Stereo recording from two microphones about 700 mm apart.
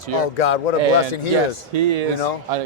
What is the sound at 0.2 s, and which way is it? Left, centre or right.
Speech, left.